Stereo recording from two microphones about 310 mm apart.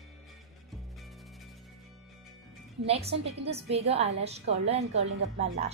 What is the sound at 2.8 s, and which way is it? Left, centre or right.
A woman's voice, centre.